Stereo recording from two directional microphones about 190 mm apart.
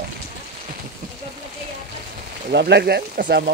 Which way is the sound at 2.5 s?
60° right (ahead or behind).